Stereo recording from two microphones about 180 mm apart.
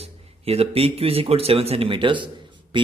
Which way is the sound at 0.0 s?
35° right (ahead or behind).